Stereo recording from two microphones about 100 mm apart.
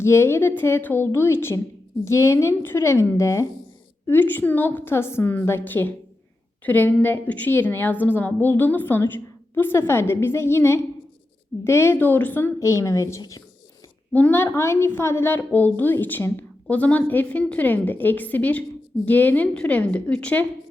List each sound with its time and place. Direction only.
0.0 s a woman's voice: 25° left (ahead or behind)
14.1 s a woman's voice: 15° left (ahead or behind)